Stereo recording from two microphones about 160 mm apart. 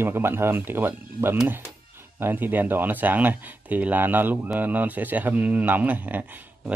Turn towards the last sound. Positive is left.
turn(degrees=-10)  # may be behind; listen again after turning